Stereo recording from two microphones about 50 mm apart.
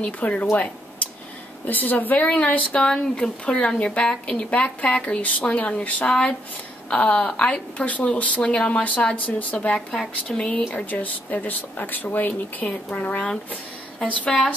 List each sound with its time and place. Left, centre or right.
0.0 s speech: left
1.7 s speech: left
2.2 s speech: left
9.8 s speech: centre
10.9 s speech: left